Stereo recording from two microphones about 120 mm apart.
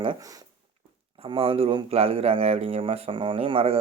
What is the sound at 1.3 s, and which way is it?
Speech, 50° right (ahead or behind).